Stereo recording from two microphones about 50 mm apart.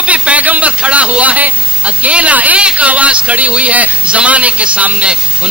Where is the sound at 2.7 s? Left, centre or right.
Right.